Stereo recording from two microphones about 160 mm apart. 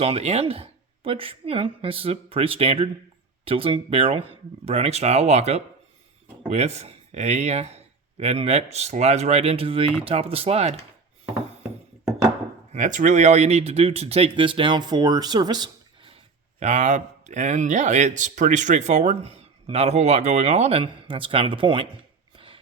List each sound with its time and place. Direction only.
0.0 s speech: 40° right (ahead or behind)
12.7 s speech: 55° right (ahead or behind); by 16.1 s 25° right (ahead or behind)
16.6 s speech: 50° right (ahead or behind); by 21.8 s 30° right (ahead or behind)
22.4 s a sound: 35° right (ahead or behind)